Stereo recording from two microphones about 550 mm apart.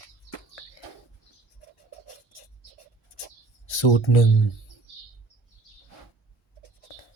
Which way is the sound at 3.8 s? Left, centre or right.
Left.